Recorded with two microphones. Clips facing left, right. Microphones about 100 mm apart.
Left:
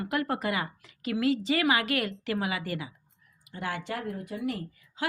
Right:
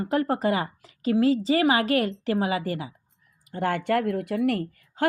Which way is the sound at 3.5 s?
50° right (ahead or behind).